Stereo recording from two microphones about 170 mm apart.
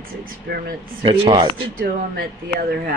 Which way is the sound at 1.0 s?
30° right (ahead or behind).